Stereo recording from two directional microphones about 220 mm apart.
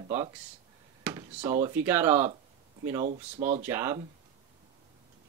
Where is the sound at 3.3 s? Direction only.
35° right (ahead or behind).